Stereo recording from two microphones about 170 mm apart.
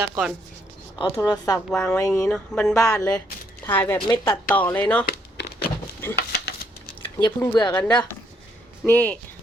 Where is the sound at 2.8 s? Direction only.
20° left (ahead or behind).